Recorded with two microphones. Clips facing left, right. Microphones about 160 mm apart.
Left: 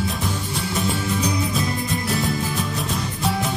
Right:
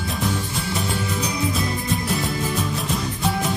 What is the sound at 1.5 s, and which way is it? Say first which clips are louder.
Music: even; centre (ahead or behind).